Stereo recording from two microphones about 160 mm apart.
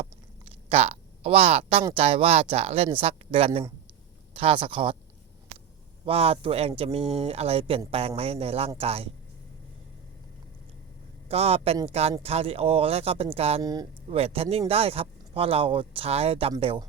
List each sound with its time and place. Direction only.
0.7 s speech: 40° right (ahead or behind)
6.1 s speech: 40° right (ahead or behind)
11.3 s speech: 40° right (ahead or behind)
13.6 s speech: 20° right (ahead or behind)
14.1 s speech: 40° right (ahead or behind)